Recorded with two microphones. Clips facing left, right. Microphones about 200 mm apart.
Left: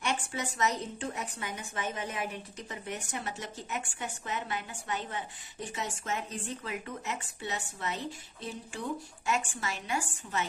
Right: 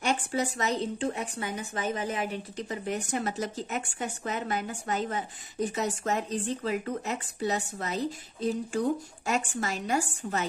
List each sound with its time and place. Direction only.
0.0 s a woman's voice: 35° right (ahead or behind)